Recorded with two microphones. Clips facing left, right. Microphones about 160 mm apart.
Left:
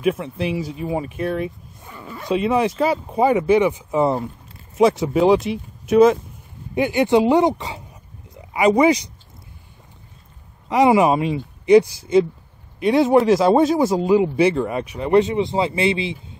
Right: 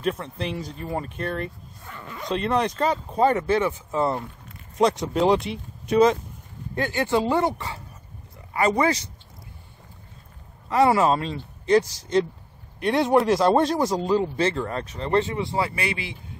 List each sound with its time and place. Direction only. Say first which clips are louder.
0.0 s speech: left 6 dB; 10° left (ahead or behind)
4.7 s speech: left 5 dB; 5° left (ahead or behind)
6.7 s speech: left 7 dB; 15° left (ahead or behind)
10.7 s speech: left 4 dB; 15° left (ahead or behind)